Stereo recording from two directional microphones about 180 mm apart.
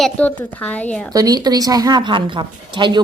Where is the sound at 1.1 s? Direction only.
20° right (ahead or behind).